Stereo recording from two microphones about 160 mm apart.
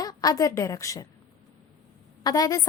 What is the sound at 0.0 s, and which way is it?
A woman's voice, 25° left (ahead or behind).